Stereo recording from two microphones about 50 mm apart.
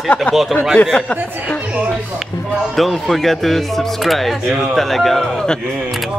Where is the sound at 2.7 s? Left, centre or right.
Centre.